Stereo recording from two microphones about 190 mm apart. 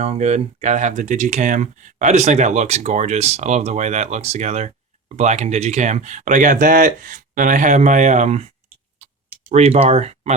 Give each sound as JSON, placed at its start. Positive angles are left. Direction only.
{"t": 0.0, "sound": "speech", "side_deg": -35}
{"t": 9.0, "sound": "tick", "side_deg": -35}
{"t": 9.5, "sound": "speech", "side_deg": -35}